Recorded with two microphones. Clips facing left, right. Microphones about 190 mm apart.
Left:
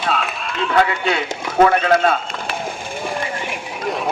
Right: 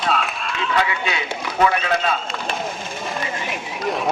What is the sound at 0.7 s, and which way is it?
A man's voice, 50° left (ahead or behind).